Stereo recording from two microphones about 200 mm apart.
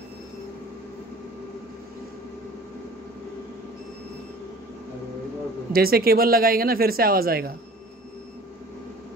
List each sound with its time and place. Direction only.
5.7 s speech: 50° right (ahead or behind)